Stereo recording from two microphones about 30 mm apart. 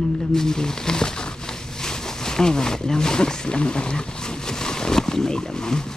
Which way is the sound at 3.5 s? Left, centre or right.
Left.